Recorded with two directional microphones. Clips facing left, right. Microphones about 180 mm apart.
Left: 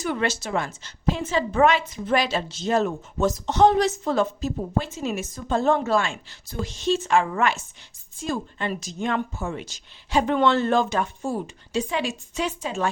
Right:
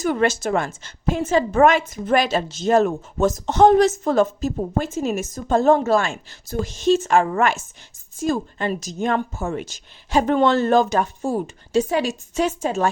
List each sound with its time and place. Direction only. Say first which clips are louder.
0.0 s a woman's voice: right 6 dB; 45° right (ahead or behind)